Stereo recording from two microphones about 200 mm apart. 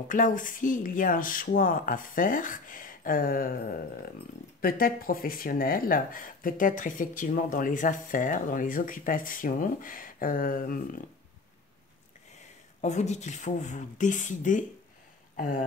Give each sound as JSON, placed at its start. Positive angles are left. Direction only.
{"t": 0.1, "sound": "speech", "side_deg": 40}
{"t": 12.8, "sound": "speech", "side_deg": 35}